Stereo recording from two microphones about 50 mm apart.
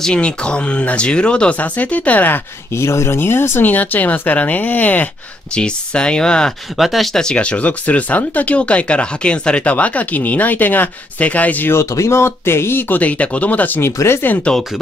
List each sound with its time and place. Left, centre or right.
0.0 s speech: centre; by 2.4 s left
2.7 s speech: left
3.2 s speech: left
3.6 s speech: left
5.5 s speech: centre
6.8 s speech: centre
7.2 s speech: centre
11.7 s speech: left
13.0 s speech: left
13.9 s speech: left
14.5 s speech: left